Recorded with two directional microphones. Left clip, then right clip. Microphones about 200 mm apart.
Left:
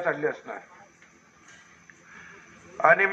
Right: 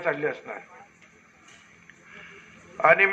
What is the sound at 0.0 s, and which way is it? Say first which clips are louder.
Speech: even; 50° right (ahead or behind).